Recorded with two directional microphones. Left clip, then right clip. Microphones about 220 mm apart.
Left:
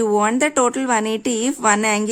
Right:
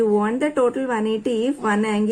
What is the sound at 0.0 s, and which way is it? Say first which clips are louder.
Speech: left 2 dB; 45° left (ahead or behind).